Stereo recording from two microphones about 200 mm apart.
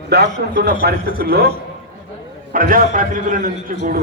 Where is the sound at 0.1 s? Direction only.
55° right (ahead or behind).